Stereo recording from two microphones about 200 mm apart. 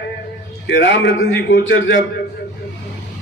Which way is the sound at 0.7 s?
60° left (ahead or behind).